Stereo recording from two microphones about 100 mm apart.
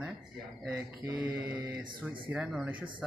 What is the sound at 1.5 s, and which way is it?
A man's voice, 20° right (ahead or behind).